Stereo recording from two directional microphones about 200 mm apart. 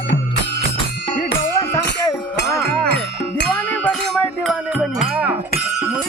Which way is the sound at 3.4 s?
5° left (ahead or behind).